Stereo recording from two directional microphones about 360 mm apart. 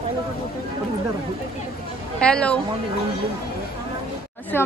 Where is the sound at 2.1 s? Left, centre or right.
Centre.